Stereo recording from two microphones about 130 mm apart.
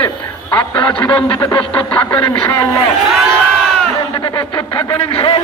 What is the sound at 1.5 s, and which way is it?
Speech, 40° left (ahead or behind).